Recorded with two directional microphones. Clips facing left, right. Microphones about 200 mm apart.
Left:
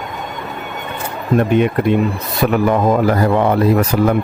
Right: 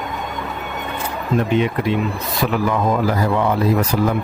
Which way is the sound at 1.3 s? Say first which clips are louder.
Left 4 dB; 55° left (ahead or behind).